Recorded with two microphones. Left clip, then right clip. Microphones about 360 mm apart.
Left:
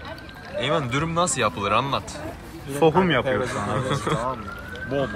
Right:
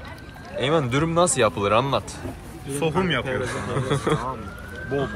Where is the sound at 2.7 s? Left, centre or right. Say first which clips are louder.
Left 5 dB; left.